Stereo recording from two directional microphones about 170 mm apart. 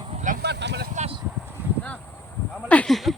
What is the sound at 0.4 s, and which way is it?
Vehicle, 80° right.